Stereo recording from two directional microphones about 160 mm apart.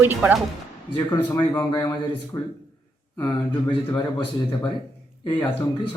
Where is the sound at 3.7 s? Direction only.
30° left (ahead or behind).